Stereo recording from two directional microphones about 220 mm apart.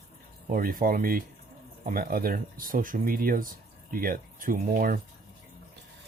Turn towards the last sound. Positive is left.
turn(degrees=-40)  # may be behind; listen again after turning